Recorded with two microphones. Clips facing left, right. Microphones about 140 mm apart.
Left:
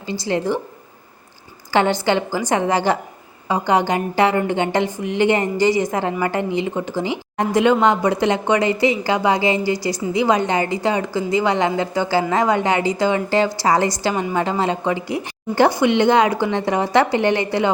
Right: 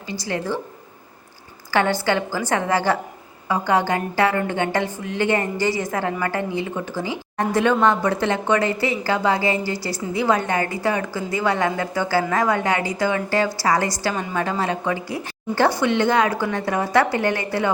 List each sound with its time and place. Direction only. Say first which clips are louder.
0.1 s a woman's voice: left 5 dB; 25° left (ahead or behind)
1.7 s a woman's voice: left 3 dB; 20° left (ahead or behind)